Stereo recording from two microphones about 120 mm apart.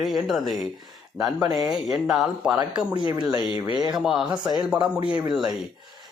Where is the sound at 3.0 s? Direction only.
35° right (ahead or behind).